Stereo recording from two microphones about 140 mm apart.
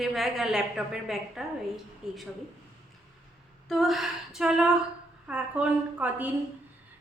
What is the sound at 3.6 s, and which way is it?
A woman's voice, centre (ahead or behind).